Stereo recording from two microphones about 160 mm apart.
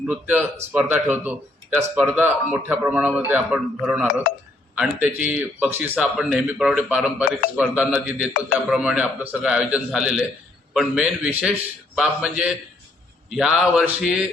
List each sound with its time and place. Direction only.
0.1 s a man's voice: 5° right (ahead or behind)